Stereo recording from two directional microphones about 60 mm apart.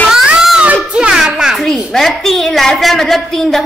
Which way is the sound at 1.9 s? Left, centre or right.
Centre.